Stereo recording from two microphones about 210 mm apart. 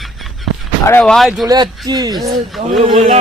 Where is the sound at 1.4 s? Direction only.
20° right (ahead or behind).